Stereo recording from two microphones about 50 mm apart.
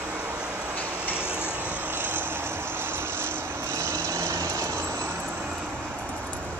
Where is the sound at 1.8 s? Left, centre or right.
Right.